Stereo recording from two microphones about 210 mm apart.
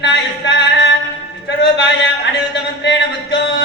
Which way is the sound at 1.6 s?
55° left (ahead or behind).